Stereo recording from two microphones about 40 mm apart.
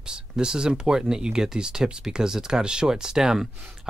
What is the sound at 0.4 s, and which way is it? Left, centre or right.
Speech, centre.